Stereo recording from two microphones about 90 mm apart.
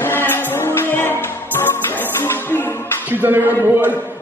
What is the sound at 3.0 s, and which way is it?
Speech, 20° right (ahead or behind).